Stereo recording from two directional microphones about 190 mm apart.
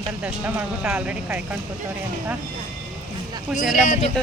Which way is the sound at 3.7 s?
45° left (ahead or behind).